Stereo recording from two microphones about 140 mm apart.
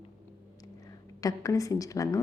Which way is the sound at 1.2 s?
25° left (ahead or behind).